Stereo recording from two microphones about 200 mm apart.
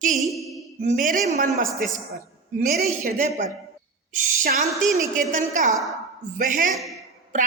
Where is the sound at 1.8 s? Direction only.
40° right (ahead or behind).